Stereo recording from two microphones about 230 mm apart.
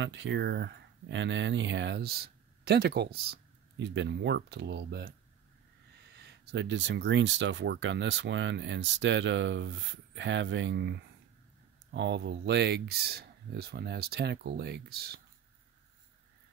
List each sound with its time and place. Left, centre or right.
0.0 s speech: right
6.1 s speech: right